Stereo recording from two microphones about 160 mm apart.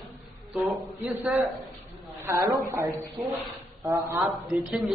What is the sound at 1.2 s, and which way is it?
Speech, centre (ahead or behind).